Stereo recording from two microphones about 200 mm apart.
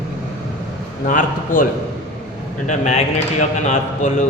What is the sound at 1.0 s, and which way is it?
Speech, 40° left (ahead or behind).